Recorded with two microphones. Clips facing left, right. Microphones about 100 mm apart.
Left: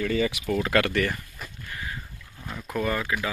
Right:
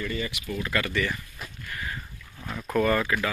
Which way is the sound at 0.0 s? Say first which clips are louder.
Left 6 dB; 85° left.